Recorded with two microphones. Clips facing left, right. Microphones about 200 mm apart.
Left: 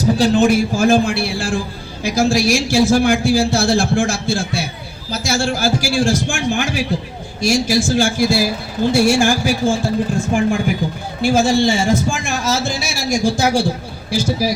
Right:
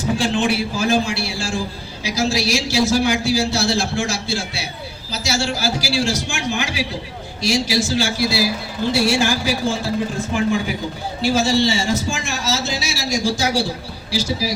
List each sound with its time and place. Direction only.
0.0 s a man's voice: 40° left (ahead or behind)